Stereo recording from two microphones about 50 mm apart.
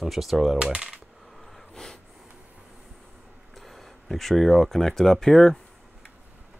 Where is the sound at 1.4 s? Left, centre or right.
Centre.